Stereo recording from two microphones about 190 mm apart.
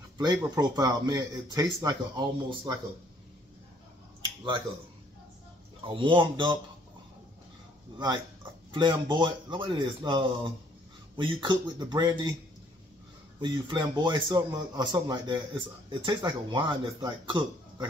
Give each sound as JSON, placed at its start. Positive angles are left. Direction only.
{"t": 0.2, "sound": "a man's voice", "side_deg": -20}
{"t": 4.2, "sound": "finger snapping", "side_deg": -25}
{"t": 5.9, "sound": "a man's voice", "side_deg": -25}
{"t": 9.1, "sound": "a man's voice", "side_deg": -25}
{"t": 13.4, "sound": "a man's voice", "side_deg": -25}